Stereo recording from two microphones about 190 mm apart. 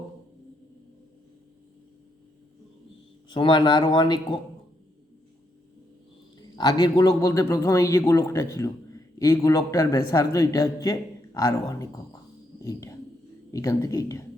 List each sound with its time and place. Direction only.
3.2 s speech: 25° left (ahead or behind)
6.6 s a man's voice: 20° left (ahead or behind)